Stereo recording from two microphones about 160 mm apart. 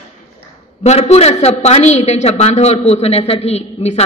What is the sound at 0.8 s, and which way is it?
A man's voice, 40° left (ahead or behind).